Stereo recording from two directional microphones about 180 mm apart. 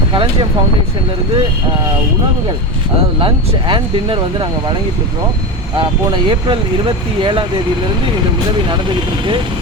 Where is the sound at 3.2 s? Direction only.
30° right (ahead or behind).